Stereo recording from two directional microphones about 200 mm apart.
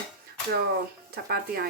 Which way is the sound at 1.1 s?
50° right (ahead or behind).